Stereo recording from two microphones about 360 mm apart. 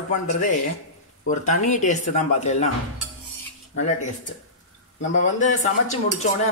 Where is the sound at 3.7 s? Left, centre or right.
Centre.